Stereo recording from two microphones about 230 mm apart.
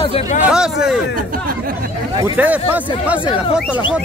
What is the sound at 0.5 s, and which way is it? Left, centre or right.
Speech, centre.